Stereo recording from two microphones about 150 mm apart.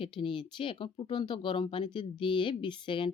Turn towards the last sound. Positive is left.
turn(degrees=35)  # may be behind; listen again after turning